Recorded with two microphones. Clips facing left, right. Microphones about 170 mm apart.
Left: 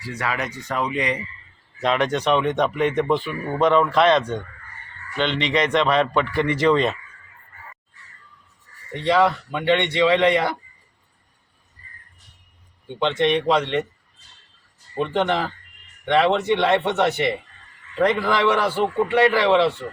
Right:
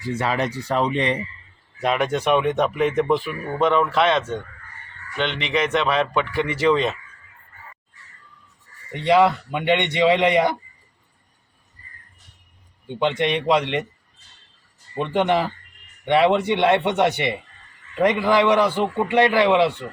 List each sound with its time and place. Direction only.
0.0 s speech: 25° right (ahead or behind)
1.8 s a man's voice: 10° right (ahead or behind)
9.0 s a man's voice: 15° right (ahead or behind)
13.0 s a man's voice: 15° right (ahead or behind)
15.1 s a man's voice: 15° right (ahead or behind)